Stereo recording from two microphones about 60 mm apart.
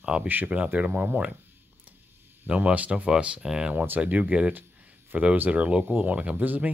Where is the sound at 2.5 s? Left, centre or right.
Right.